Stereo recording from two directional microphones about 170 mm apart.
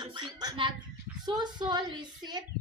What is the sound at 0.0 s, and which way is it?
Speech, 25° right (ahead or behind).